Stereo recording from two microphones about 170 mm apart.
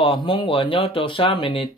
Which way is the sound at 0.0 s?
30° left (ahead or behind).